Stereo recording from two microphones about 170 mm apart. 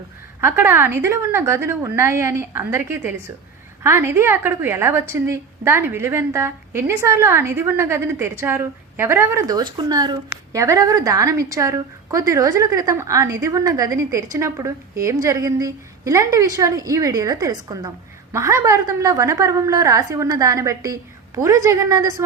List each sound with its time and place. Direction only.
0.4 s a woman's voice: 15° right (ahead or behind)